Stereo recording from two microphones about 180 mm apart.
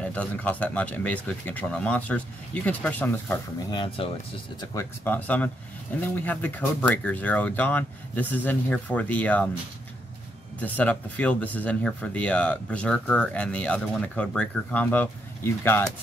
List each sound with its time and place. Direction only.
0.1 s speech: 10° left (ahead or behind)
3.7 s speech: 30° left (ahead or behind)
4.7 s speech: 10° left (ahead or behind)
10.6 s speech: 10° left (ahead or behind)